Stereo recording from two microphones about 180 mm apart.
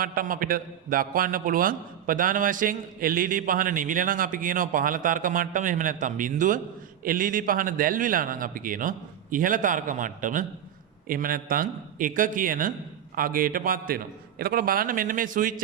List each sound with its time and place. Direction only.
0.0 s a man's voice: 50° right (ahead or behind)